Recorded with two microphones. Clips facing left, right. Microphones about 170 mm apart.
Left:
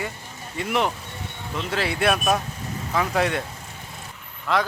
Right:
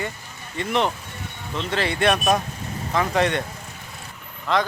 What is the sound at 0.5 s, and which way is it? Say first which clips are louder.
Speech: right 1 dB; 5° left (ahead or behind).